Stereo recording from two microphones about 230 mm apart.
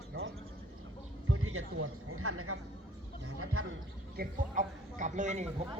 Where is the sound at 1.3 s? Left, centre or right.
Right.